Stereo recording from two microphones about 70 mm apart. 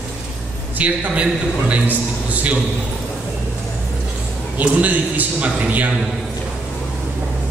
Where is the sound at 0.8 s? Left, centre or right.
Centre.